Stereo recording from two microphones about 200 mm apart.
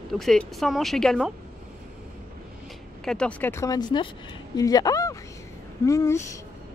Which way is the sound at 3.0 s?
5° left (ahead or behind).